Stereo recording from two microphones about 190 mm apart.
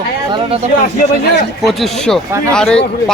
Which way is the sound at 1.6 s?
Centre (ahead or behind).